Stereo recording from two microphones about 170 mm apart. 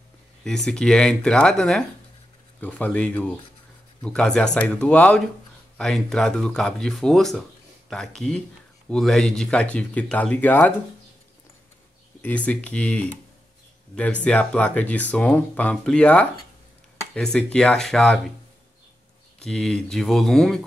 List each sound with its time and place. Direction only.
0.4 s speech: 5° left (ahead or behind)
12.2 s speech: 10° left (ahead or behind)
19.4 s speech: 5° left (ahead or behind)